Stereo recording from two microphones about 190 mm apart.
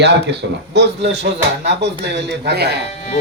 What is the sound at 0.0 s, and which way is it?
Speech, 65° right (ahead or behind).